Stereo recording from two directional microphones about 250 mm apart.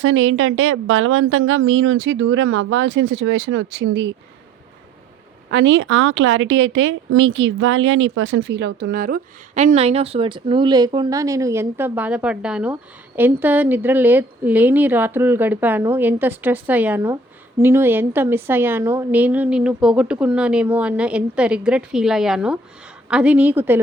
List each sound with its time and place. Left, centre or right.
0.0 s a woman's voice: right
5.5 s a woman's voice: right; by 23.8 s centre